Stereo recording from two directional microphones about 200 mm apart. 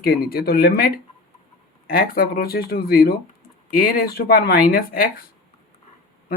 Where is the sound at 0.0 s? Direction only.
50° left (ahead or behind).